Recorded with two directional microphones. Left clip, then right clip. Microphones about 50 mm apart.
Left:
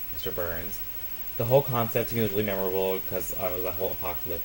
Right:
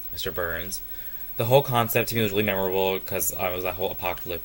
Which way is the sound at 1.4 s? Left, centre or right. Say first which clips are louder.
Right 3 dB; right.